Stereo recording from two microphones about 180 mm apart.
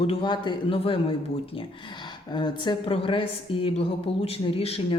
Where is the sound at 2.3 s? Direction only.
25° left (ahead or behind).